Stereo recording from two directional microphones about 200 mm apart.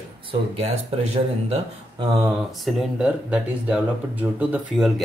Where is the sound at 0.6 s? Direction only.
30° right (ahead or behind).